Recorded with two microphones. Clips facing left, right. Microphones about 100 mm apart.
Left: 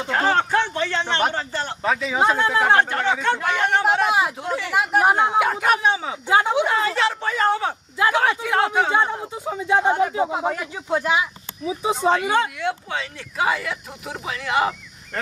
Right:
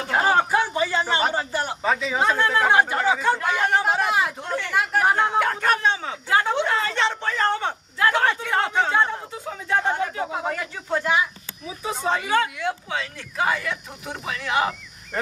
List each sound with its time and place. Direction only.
0.1 s a man's voice: 10° right (ahead or behind)
1.9 s speech: centre (ahead or behind)
2.3 s speech: 20° left (ahead or behind)
2.7 s speech: 5° right (ahead or behind)
4.1 s speech: 10° left (ahead or behind)
12.5 s speech: centre (ahead or behind)